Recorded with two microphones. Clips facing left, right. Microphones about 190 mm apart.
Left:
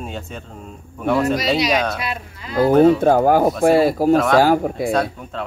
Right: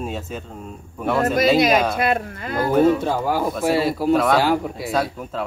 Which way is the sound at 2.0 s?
50° right (ahead or behind).